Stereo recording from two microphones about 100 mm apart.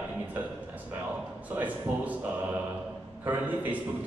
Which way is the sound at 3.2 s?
15° right (ahead or behind).